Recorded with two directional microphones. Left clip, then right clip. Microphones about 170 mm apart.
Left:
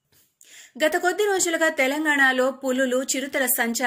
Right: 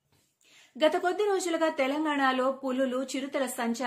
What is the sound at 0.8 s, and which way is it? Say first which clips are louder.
A woman's voice: left 4 dB; 10° left (ahead or behind).